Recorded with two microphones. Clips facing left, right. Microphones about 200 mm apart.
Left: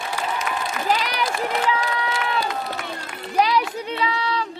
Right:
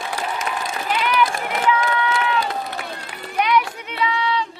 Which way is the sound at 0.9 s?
40° left (ahead or behind).